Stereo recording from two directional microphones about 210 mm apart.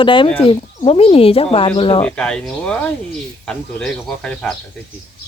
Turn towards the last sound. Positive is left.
turn(degrees=5)  # may be behind; listen again after turning